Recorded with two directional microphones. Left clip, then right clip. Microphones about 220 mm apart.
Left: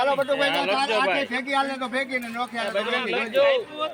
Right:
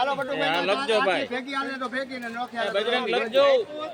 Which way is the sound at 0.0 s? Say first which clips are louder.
Left 4 dB; 50° left (ahead or behind).